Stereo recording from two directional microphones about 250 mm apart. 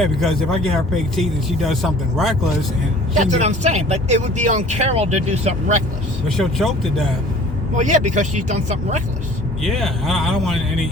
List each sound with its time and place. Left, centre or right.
0.0 s speech: centre
3.2 s speech: right
6.2 s speech: centre
7.8 s speech: right
9.6 s speech: centre